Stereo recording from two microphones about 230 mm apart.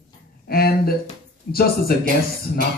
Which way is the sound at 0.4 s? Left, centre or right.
Left.